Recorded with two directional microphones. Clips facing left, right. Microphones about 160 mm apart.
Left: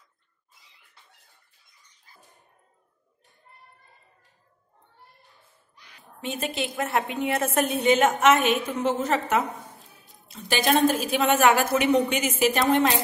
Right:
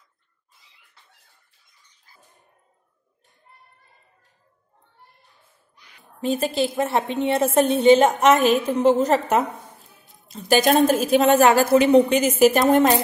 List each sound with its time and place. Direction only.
6.2 s a woman's voice: 35° right (ahead or behind)